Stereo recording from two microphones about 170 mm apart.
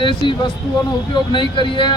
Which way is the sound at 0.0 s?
30° left (ahead or behind).